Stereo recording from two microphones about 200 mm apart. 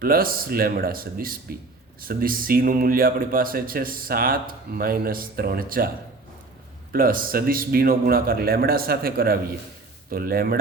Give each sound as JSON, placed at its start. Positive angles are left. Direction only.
{"t": 0.0, "sound": "speech", "side_deg": -45}
{"t": 6.9, "sound": "speech", "side_deg": -45}